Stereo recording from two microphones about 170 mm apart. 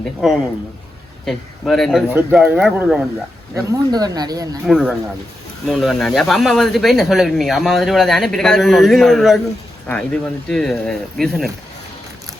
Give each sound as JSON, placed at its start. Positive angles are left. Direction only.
{"t": 0.2, "sound": "speech", "side_deg": 0}
{"t": 2.1, "sound": "speech", "side_deg": -10}
{"t": 3.5, "sound": "speech", "side_deg": -20}
{"t": 4.6, "sound": "speech", "side_deg": 0}